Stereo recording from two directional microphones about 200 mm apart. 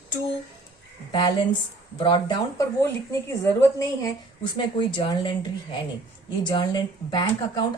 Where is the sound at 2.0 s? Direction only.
20° left (ahead or behind).